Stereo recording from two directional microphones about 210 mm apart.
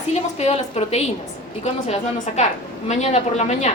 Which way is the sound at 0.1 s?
30° left (ahead or behind).